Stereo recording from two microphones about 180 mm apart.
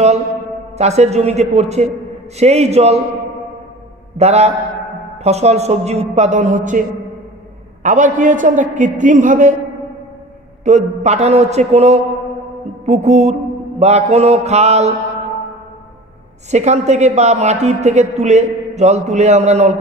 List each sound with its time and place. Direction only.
0.7 s a man's voice: 35° right (ahead or behind)
4.2 s a man's voice: 35° right (ahead or behind)
7.8 s a man's voice: 45° right (ahead or behind)
10.6 s a man's voice: 40° right (ahead or behind)
16.4 s a man's voice: 40° right (ahead or behind)